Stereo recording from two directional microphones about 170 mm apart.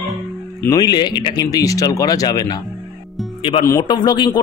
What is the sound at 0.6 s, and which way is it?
A man's voice, 20° left (ahead or behind).